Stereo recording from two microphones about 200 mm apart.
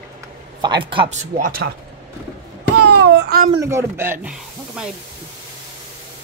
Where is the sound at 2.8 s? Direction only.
50° right (ahead or behind).